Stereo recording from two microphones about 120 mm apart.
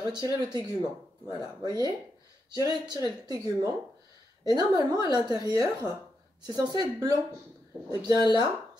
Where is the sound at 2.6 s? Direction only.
30° right (ahead or behind).